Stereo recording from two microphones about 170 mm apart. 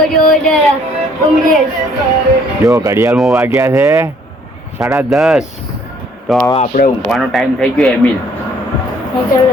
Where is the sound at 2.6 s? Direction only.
20° right (ahead or behind).